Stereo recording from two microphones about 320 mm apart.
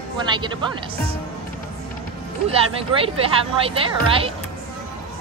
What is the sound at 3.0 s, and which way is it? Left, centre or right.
A woman's voice, centre.